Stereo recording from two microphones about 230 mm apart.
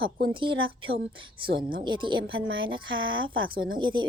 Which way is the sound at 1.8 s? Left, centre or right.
Right.